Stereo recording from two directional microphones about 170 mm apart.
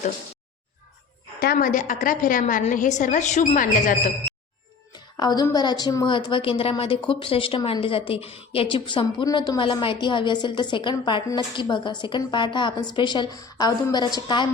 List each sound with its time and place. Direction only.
1.4 s a woman's voice: 60° left (ahead or behind)
5.1 s a woman's voice: 25° left (ahead or behind)